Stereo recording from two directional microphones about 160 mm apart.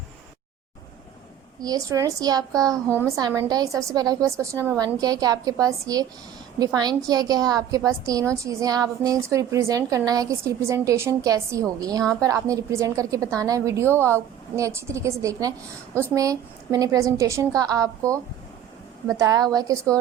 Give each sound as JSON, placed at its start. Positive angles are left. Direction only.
{"t": 1.6, "sound": "a woman's voice", "side_deg": -20}